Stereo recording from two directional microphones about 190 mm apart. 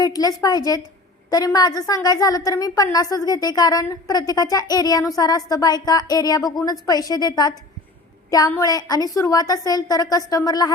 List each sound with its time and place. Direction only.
0.0 s a woman's voice: 20° left (ahead or behind)